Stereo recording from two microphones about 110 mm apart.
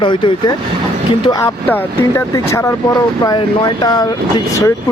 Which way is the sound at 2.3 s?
25° left (ahead or behind).